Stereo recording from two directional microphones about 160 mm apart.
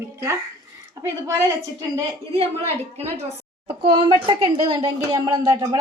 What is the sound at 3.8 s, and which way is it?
A woman's voice, 30° right (ahead or behind).